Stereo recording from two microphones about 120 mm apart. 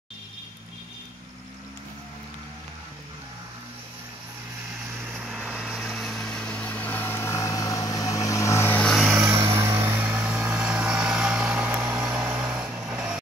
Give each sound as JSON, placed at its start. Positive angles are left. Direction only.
{"t": 5.2, "sound": "vehicle", "side_deg": -5}
{"t": 8.8, "sound": "vehicle", "side_deg": 0}
{"t": 9.3, "sound": "vehicle", "side_deg": -25}